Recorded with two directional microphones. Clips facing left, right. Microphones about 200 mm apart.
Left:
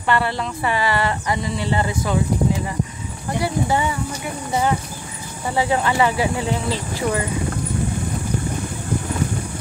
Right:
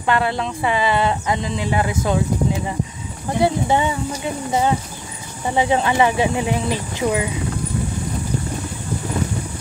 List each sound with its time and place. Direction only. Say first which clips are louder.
0.0 s speech: right 1 dB; 15° right (ahead or behind)
3.3 s speech: right 3 dB; 20° right (ahead or behind)
5.5 s speech: right 2 dB; 20° right (ahead or behind)